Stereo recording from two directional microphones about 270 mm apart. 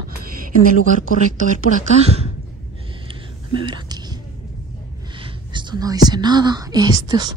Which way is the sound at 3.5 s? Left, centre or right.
Centre.